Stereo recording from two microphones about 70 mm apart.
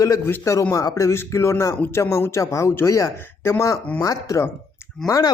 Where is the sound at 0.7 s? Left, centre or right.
Left.